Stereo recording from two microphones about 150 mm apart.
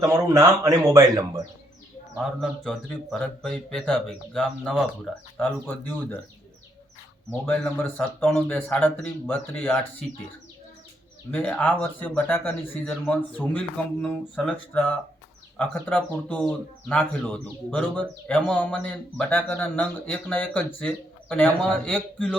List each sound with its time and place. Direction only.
0.0 s speech: 20° right (ahead or behind)
2.1 s speech: centre (ahead or behind)
5.4 s speech: 15° left (ahead or behind)
7.4 s speech: 5° left (ahead or behind)
11.3 s speech: 10° left (ahead or behind)